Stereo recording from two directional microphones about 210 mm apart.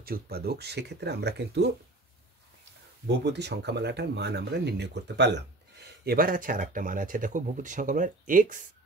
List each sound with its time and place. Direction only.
0.0 s speech: 45° right (ahead or behind)
3.1 s speech: 55° right (ahead or behind)